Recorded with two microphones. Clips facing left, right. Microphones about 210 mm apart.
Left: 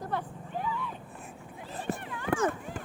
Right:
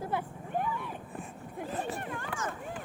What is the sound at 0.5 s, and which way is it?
Vehicle, 55° right (ahead or behind).